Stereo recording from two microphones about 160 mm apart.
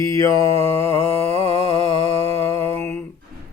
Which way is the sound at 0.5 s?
40° right (ahead or behind).